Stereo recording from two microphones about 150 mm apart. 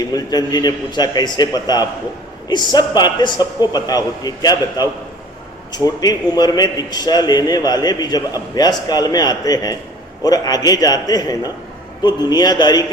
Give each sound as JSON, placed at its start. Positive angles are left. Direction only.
{"t": 0.0, "sound": "a man's voice", "side_deg": 25}
{"t": 5.7, "sound": "a man's voice", "side_deg": 25}